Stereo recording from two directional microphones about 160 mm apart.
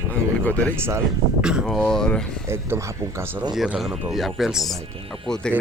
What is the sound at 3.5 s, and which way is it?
Speech, 5° right (ahead or behind).